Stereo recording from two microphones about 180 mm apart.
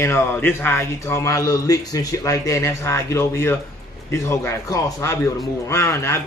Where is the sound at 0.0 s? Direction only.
10° left (ahead or behind).